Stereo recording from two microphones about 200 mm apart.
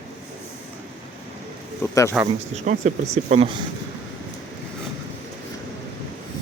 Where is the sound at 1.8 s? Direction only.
15° left (ahead or behind).